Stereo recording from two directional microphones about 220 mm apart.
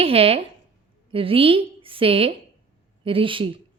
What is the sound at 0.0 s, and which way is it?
A woman's voice, 25° right (ahead or behind).